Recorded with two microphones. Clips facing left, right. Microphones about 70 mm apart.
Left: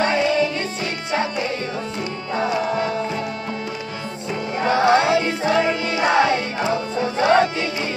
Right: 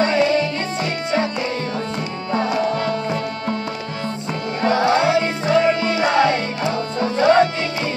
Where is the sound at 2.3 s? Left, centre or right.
Centre.